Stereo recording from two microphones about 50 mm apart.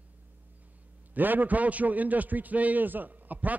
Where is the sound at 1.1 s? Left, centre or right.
Right.